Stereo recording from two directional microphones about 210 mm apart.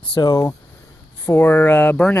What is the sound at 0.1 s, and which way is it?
Speech, 20° left (ahead or behind).